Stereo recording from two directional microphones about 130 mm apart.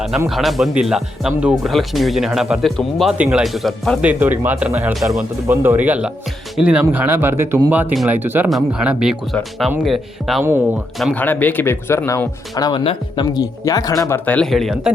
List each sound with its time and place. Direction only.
0.3 s speech: centre (ahead or behind)
3.2 s speech: 10° right (ahead or behind)
4.0 s speech: 15° right (ahead or behind)
8.4 s speech: 5° right (ahead or behind)
11.1 s speech: 15° left (ahead or behind); by 12.8 s 30° left (ahead or behind)
12.8 s speech: 45° left (ahead or behind)
13.3 s speech: 30° left (ahead or behind)
14.3 s speech: 5° left (ahead or behind)